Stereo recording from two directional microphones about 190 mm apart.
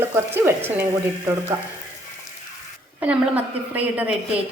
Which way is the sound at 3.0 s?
10° right (ahead or behind).